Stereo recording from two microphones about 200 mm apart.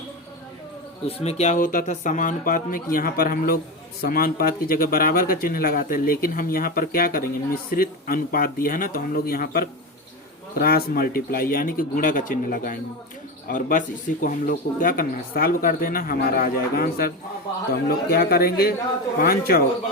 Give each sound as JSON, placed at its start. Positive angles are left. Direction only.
{"t": 1.0, "sound": "speech", "side_deg": 30}